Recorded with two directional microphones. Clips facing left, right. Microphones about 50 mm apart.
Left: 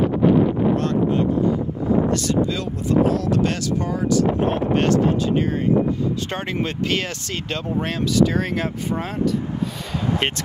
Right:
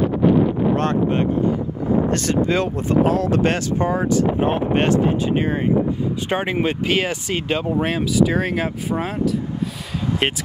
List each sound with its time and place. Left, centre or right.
0.7 s speech: right; by 10.4 s centre